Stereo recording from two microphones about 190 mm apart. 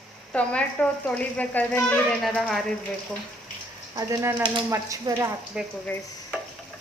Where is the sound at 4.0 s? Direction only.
20° right (ahead or behind).